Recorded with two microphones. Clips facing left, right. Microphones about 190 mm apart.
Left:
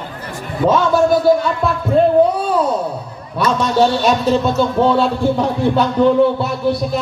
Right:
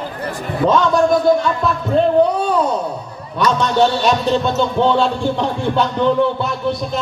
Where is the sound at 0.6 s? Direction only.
5° left (ahead or behind).